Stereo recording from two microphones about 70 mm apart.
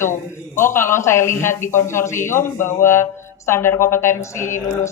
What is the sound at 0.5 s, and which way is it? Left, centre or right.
A woman's voice, left.